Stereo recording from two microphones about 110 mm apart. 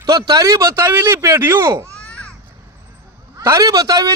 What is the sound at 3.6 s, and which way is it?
Speech, 35° right (ahead or behind).